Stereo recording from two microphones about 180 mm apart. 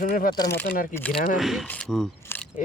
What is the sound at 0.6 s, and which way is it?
Speech, 55° left (ahead or behind).